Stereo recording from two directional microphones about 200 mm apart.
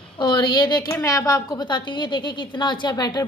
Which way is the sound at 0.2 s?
25° left (ahead or behind).